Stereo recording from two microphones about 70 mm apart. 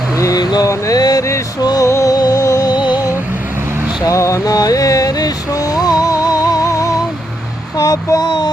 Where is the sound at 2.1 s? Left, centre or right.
Left.